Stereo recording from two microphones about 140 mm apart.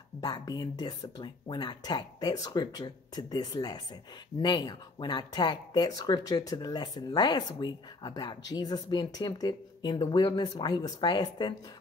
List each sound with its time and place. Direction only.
0.2 s speech: 30° left (ahead or behind)